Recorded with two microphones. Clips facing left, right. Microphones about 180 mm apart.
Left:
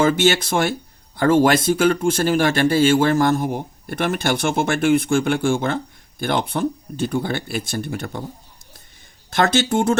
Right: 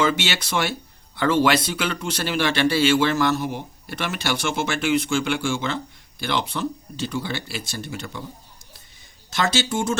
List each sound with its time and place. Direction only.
0.0 s speech: 50° left (ahead or behind)
9.3 s speech: 55° left (ahead or behind)